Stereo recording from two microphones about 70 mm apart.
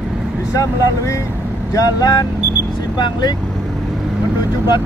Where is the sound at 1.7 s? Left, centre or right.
Left.